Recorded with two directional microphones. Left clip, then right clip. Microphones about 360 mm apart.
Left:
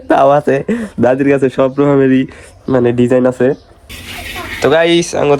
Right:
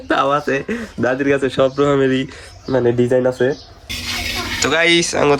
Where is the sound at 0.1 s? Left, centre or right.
Centre.